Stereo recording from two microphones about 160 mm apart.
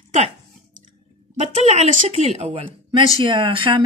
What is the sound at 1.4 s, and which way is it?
A woman's voice, 40° right (ahead or behind).